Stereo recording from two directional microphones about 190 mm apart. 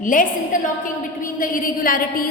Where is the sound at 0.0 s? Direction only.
45° left (ahead or behind).